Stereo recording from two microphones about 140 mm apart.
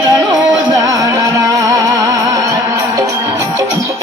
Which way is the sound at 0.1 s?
25° right (ahead or behind).